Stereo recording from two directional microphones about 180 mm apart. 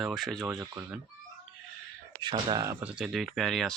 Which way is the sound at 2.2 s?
25° right (ahead or behind).